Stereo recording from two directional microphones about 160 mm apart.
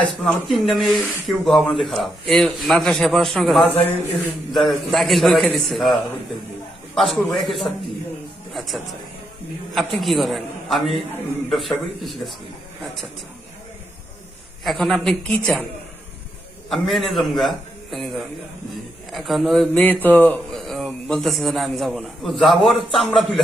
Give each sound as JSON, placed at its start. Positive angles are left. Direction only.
{"t": 0.0, "sound": "speech", "side_deg": 5}
{"t": 14.6, "sound": "speech", "side_deg": 0}
{"t": 16.6, "sound": "speech", "side_deg": 0}
{"t": 19.1, "sound": "a man's voice", "side_deg": 0}
{"t": 20.5, "sound": "speech", "side_deg": 0}